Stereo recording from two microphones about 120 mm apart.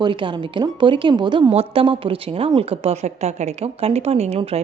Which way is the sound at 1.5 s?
55° right (ahead or behind).